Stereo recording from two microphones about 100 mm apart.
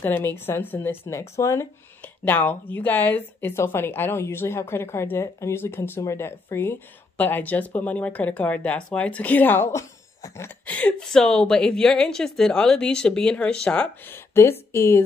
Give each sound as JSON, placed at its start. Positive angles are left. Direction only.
{"t": 0.0, "sound": "a woman's voice", "side_deg": 20}
{"t": 2.0, "sound": "a sound", "side_deg": 20}
{"t": 2.7, "sound": "a woman's voice", "side_deg": 20}
{"t": 9.7, "sound": "speech", "side_deg": 30}
{"t": 10.6, "sound": "a woman's voice", "side_deg": 15}
{"t": 14.0, "sound": "speech", "side_deg": 25}